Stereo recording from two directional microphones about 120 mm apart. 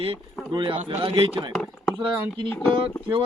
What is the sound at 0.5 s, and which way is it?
Speech, 40° right (ahead or behind).